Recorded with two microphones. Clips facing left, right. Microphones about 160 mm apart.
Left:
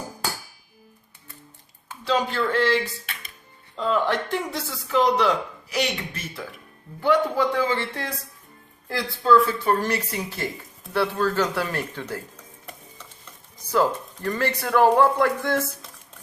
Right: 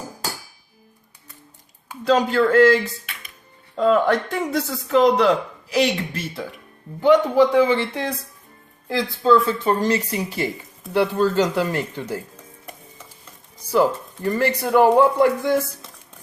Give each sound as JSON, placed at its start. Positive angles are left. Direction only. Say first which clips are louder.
{"t": 2.0, "sound": "speech", "louder": "right 6 dB", "side_deg": -45}
{"t": 3.8, "sound": "speech", "louder": "right 6 dB", "side_deg": -50}
{"t": 4.6, "sound": "speech", "louder": "right 5 dB", "side_deg": -40}
{"t": 7.0, "sound": "a man's voice", "louder": "right 6 dB", "side_deg": -20}
{"t": 13.7, "sound": "speech", "louder": "right 3 dB", "side_deg": -15}